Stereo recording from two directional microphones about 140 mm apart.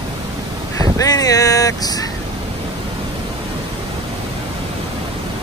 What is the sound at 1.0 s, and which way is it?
Speech, 25° left (ahead or behind).